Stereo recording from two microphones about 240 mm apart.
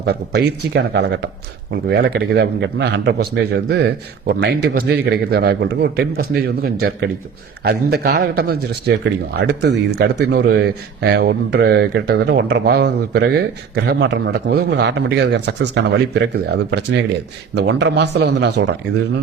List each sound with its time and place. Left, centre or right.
0.0 s a man's voice: right